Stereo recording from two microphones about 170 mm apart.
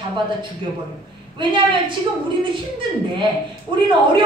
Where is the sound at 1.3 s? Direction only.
30° right (ahead or behind).